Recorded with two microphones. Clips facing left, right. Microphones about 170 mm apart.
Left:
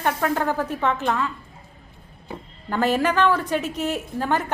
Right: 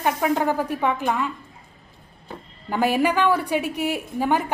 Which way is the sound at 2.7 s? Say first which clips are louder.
Even; 10° right (ahead or behind).